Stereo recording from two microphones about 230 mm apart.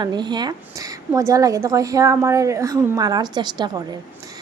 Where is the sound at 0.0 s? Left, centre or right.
Centre.